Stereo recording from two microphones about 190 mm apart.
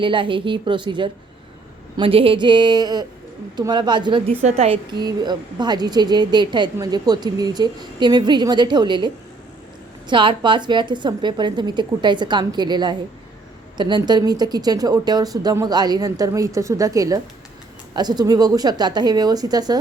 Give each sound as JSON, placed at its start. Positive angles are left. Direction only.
{"t": 0.0, "sound": "a woman's voice", "side_deg": -25}
{"t": 4.9, "sound": "a woman's voice", "side_deg": -20}